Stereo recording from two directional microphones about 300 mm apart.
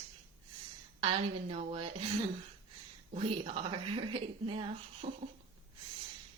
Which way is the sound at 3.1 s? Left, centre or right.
Centre.